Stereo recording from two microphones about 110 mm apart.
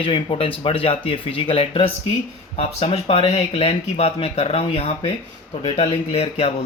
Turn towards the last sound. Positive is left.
turn(degrees=65)  # may be behind; listen again after turning